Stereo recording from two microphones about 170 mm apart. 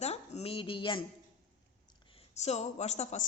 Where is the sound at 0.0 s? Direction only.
40° left (ahead or behind).